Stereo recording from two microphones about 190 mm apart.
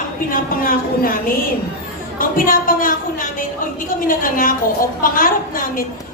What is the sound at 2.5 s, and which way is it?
Speech, 45° left (ahead or behind).